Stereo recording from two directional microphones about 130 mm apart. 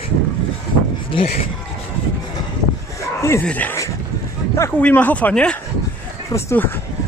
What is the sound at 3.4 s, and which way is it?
Speech, 10° left (ahead or behind).